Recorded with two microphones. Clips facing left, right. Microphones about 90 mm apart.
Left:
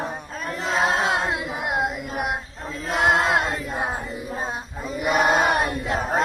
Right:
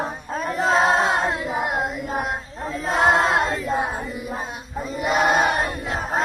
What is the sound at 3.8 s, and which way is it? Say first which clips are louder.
Crowd: right 1 dB; 20° left (ahead or behind).